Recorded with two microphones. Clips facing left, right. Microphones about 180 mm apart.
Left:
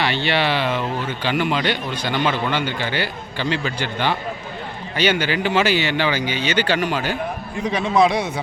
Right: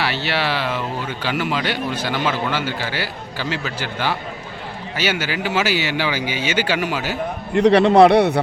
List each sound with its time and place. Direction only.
0.0 s speech: 5° right (ahead or behind)
7.5 s a man's voice: 70° right (ahead or behind)